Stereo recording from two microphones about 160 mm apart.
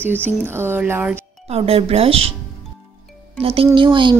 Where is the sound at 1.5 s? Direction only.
40° right (ahead or behind).